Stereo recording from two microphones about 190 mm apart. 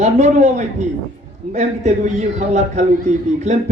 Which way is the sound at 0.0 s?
40° right (ahead or behind).